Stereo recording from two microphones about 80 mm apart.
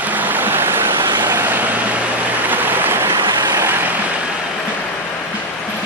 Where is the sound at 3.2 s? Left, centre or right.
Right.